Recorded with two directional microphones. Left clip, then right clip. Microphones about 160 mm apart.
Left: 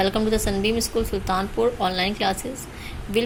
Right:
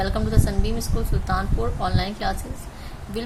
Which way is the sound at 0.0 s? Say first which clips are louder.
Left 4 dB; 20° left (ahead or behind).